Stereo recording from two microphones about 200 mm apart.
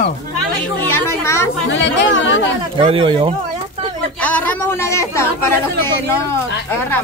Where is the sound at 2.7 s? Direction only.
30° right (ahead or behind).